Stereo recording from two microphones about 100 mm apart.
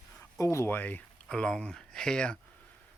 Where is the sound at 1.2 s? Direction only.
5° left (ahead or behind).